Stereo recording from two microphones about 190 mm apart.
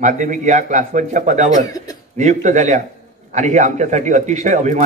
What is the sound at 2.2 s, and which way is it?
A man's voice, 40° right (ahead or behind).